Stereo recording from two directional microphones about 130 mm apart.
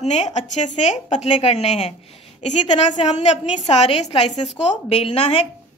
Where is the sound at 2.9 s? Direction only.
55° left (ahead or behind).